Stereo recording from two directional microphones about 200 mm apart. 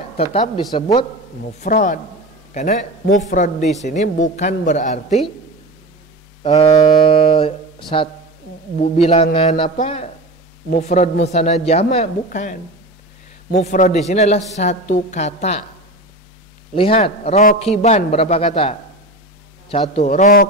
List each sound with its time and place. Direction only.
0.2 s a man's voice: 30° left (ahead or behind)
1.4 s a man's voice: 40° left (ahead or behind)
6.4 s a sound: 30° left (ahead or behind)
7.9 s a man's voice: 30° left (ahead or behind)
16.7 s a man's voice: 30° left (ahead or behind); by 20.4 s 45° left (ahead or behind)